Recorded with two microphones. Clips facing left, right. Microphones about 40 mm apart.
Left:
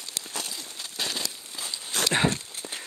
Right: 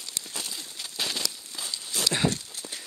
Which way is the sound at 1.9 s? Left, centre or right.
Left.